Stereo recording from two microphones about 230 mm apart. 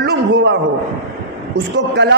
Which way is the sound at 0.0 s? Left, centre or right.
Right.